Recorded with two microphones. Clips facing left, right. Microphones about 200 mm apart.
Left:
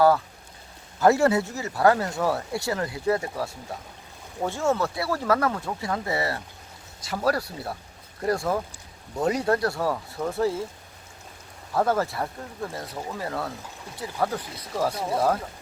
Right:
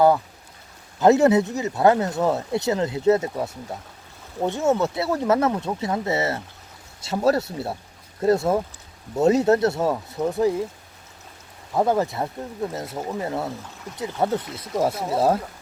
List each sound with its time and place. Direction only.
0.9 s speech: 20° right (ahead or behind)
11.7 s speech: 15° right (ahead or behind)